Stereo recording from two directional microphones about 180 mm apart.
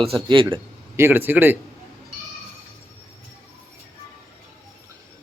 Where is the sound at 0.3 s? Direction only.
25° right (ahead or behind).